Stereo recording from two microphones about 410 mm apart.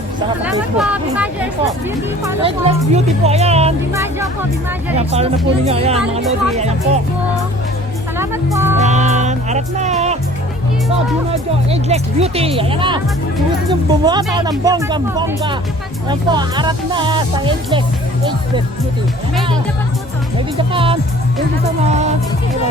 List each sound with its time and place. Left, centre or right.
0.2 s speech: centre
8.2 s speech: centre
8.8 s music: centre
11.7 s speech: centre
20.6 s speech: centre